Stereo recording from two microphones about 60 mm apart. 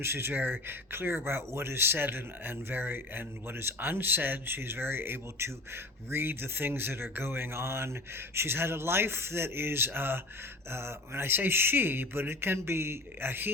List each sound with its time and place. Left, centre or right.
0.0 s speech: right